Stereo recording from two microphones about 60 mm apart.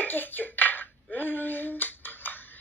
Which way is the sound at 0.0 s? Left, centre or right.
Left.